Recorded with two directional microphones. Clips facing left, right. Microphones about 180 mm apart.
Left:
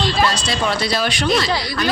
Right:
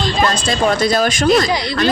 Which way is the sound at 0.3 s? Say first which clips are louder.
Right 5 dB; 50° right (ahead or behind).